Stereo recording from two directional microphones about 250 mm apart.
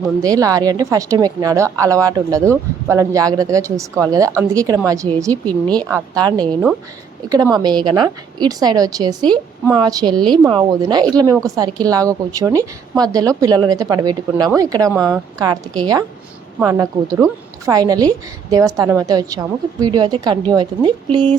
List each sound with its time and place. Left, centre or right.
0.2 s a woman's voice: centre
5.3 s speech: centre
5.7 s a woman's voice: centre
6.4 s speech: centre
7.3 s a woman's voice: centre
16.6 s a woman's voice: centre